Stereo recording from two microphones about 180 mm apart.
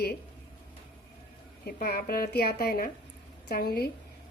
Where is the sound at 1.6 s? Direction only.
55° left (ahead or behind).